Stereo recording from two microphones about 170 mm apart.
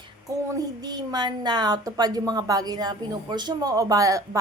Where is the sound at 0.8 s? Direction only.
25° right (ahead or behind).